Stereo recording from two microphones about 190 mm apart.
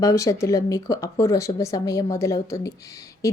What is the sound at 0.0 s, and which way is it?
Speech, 15° left (ahead or behind).